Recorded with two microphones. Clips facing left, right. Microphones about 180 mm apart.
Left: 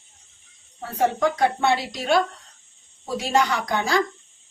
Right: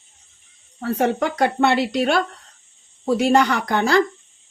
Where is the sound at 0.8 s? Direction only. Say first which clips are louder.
Right 2 dB; 70° right (ahead or behind).